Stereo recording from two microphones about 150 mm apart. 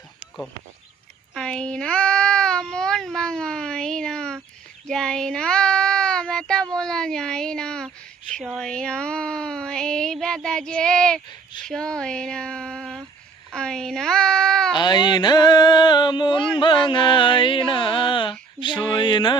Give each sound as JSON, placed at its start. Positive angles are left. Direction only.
{"t": 1.3, "sound": "speech", "side_deg": 5}
{"t": 4.9, "sound": "child singing", "side_deg": 5}
{"t": 8.3, "sound": "speech", "side_deg": 5}
{"t": 14.8, "sound": "a sound", "side_deg": 30}
{"t": 16.6, "sound": "music", "side_deg": 35}